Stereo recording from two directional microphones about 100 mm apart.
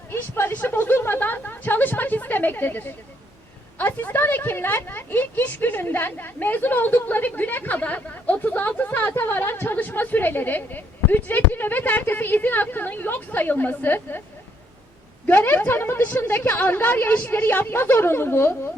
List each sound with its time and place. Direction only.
0.1 s a woman's voice: 25° left (ahead or behind)
15.3 s a woman's voice: 20° left (ahead or behind)